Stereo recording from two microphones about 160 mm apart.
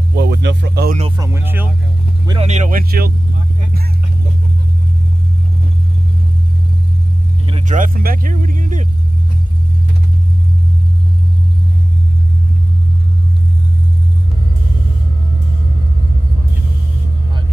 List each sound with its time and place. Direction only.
0.1 s speech: 90° right
1.1 s speech: 20° right (ahead or behind)
2.2 s speech: 40° right (ahead or behind)
2.8 s speech: 65° right (ahead or behind)
7.6 s speech: 55° right (ahead or behind)